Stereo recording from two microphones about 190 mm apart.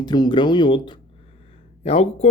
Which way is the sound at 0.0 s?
20° left (ahead or behind).